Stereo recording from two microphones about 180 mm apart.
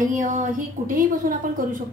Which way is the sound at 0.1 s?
45° right (ahead or behind).